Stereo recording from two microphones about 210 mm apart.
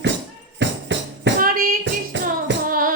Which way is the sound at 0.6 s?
55° right (ahead or behind).